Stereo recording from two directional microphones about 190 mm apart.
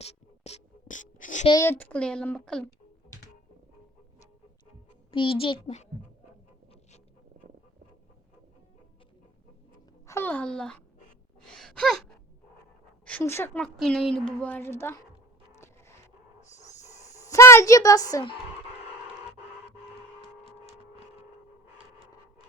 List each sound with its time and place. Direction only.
0.0 s a sound: 35° left (ahead or behind)
1.5 s a woman's voice: 15° left (ahead or behind)
5.1 s a child's voice: 25° left (ahead or behind)
10.1 s a woman's voice: 10° left (ahead or behind)
11.3 s gasp: 5° left (ahead or behind)
13.1 s a woman's voice: 10° left (ahead or behind)
13.7 s a woman's voice: centre (ahead or behind)
17.2 s a woman's voice: 15° left (ahead or behind)